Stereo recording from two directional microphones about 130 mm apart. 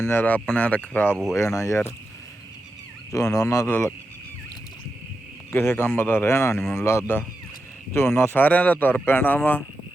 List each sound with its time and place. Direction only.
0.0 s speech: 15° left (ahead or behind)
1.1 s speech: centre (ahead or behind)
1.4 s speech: 20° left (ahead or behind)
3.1 s speech: 25° left (ahead or behind)
5.5 s speech: 15° left (ahead or behind)